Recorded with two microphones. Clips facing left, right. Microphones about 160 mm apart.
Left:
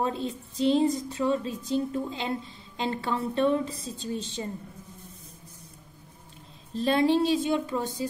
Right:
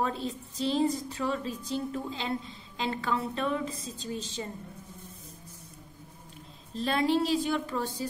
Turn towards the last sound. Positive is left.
turn(degrees=20)  # may be behind; listen again after turning